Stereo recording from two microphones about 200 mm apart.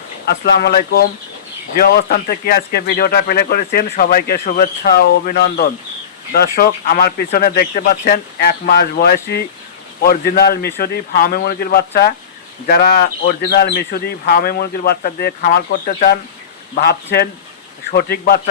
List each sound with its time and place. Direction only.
0.3 s speech: 50° left (ahead or behind)